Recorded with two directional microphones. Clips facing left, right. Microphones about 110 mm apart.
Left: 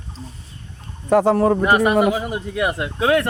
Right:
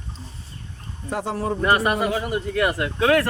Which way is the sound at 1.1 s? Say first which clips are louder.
Left 11 dB; 55° left (ahead or behind).